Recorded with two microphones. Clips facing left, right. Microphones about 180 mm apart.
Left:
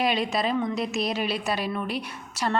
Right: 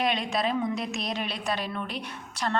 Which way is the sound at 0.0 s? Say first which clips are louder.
Left 2 dB; 5° left (ahead or behind).